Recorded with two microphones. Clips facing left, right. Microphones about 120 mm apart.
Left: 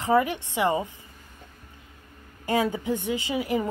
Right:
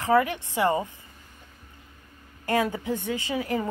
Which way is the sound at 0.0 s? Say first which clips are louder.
Even; 20° left (ahead or behind).